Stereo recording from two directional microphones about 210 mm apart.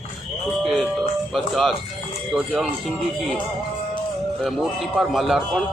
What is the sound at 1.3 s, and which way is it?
Speech, centre (ahead or behind).